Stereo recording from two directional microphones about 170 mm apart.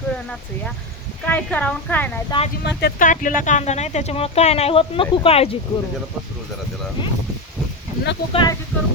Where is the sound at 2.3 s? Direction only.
25° left (ahead or behind).